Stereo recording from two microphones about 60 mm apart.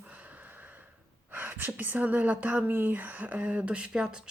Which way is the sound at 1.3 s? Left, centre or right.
Right.